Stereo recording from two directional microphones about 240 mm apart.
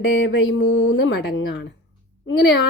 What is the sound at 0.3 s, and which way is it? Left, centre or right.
A woman's voice, left.